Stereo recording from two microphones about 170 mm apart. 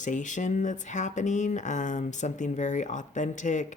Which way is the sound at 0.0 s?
45° left (ahead or behind).